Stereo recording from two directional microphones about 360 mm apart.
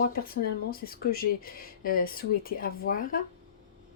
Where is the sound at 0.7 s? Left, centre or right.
Left.